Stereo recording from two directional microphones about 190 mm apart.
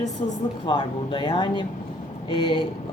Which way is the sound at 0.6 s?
25° left (ahead or behind).